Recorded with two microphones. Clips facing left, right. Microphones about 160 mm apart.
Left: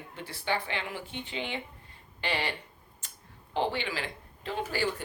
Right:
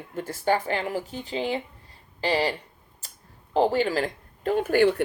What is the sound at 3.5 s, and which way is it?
Speech, 40° right (ahead or behind).